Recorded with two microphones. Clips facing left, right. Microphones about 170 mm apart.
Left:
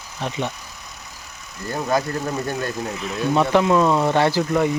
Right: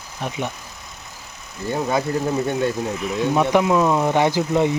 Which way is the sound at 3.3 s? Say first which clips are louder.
Left 1 dB; 10° right (ahead or behind).